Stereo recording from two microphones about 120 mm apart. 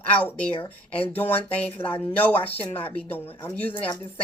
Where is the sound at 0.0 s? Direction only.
10° left (ahead or behind).